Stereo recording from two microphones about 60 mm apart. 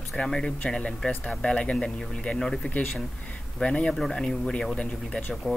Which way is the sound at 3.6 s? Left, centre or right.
Centre.